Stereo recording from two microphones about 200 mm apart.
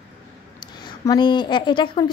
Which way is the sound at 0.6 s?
20° left (ahead or behind).